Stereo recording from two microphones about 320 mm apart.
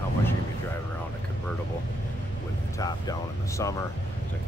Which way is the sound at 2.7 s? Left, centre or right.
Centre.